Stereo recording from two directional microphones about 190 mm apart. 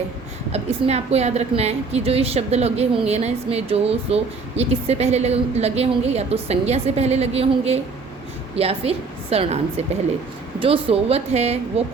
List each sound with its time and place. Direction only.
0.5 s a woman's voice: 35° right (ahead or behind)